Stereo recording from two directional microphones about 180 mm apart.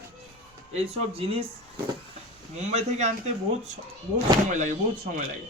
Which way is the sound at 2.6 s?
40° right (ahead or behind).